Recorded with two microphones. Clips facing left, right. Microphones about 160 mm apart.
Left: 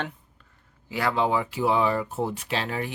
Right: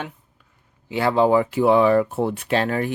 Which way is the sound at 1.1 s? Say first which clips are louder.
Right 10 dB; 45° right (ahead or behind).